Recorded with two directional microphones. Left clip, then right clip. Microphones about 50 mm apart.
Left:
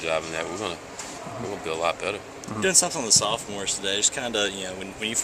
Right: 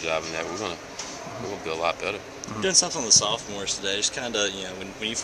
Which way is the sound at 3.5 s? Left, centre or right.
Left.